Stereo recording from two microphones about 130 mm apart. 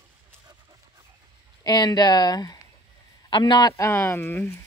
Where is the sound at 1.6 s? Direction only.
30° left (ahead or behind).